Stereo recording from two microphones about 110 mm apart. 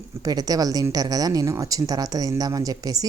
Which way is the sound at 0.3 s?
35° right (ahead or behind).